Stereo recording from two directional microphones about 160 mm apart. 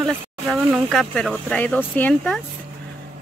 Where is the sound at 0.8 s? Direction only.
Centre (ahead or behind).